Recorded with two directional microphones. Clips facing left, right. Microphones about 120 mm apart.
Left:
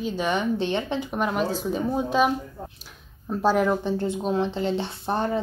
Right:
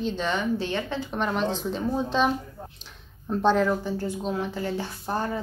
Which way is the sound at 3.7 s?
20° left (ahead or behind).